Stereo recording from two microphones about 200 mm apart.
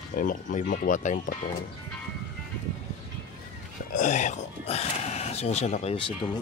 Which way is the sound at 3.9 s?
40° left (ahead or behind).